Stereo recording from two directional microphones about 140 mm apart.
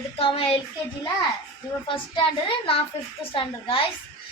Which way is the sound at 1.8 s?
40° left (ahead or behind).